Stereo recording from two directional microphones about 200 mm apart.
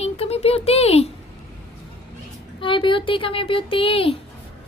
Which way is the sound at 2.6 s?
25° left (ahead or behind).